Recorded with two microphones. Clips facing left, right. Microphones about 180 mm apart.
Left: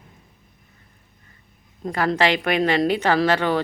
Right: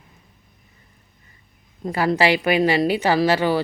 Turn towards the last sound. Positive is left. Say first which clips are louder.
# right 1 dB
turn(degrees=-5)  # may be behind; listen again after turning